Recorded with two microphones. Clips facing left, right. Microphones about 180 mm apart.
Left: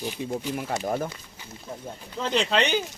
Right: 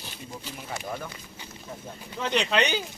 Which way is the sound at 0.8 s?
40° left (ahead or behind).